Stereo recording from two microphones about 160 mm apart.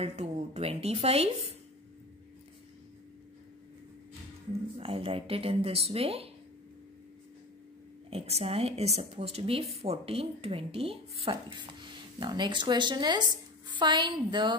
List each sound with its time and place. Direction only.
0.0 s a woman's voice: 40° right (ahead or behind)
4.7 s a woman's voice: 35° right (ahead or behind)
8.1 s a woman's voice: 40° right (ahead or behind)